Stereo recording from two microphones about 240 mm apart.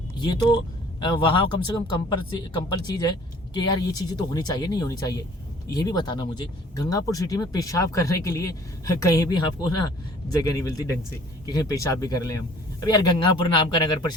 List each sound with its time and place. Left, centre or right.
0.2 s speech: centre